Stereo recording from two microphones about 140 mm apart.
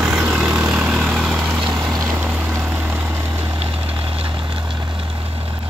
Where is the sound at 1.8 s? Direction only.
15° right (ahead or behind).